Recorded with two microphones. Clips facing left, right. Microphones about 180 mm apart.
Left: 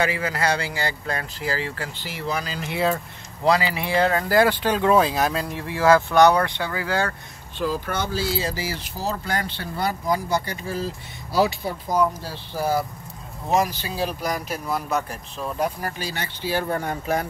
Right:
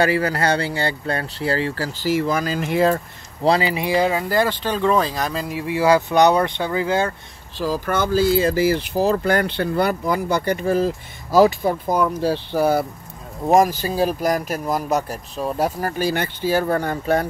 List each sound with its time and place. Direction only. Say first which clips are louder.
0.0 s speech: right 5 dB; 35° right (ahead or behind)
3.4 s speech: right 2 dB; 30° right (ahead or behind)
3.7 s speech: right 2 dB; 15° right (ahead or behind)
4.3 s speech: left 1 dB; 10° left (ahead or behind); by 7.2 s 20° right (ahead or behind)
7.5 s speech: right 4 dB; 40° right (ahead or behind); by 12.8 s 60° right (ahead or behind)
13.5 s speech: right 7 dB; 45° right (ahead or behind)